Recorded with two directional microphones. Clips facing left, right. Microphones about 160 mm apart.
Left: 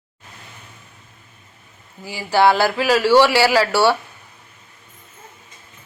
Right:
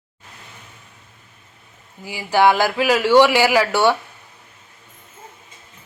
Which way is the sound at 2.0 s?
15° right (ahead or behind).